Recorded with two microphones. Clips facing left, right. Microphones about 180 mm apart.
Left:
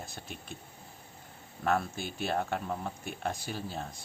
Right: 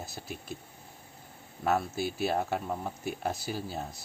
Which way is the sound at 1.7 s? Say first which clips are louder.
Right 2 dB; 5° right (ahead or behind).